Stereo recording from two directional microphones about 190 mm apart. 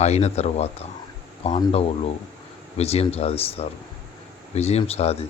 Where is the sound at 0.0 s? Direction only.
35° left (ahead or behind).